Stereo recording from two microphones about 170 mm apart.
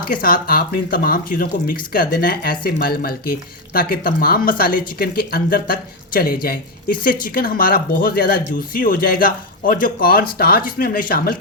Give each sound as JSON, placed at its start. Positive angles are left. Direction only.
{"t": 0.0, "sound": "speech", "side_deg": 60}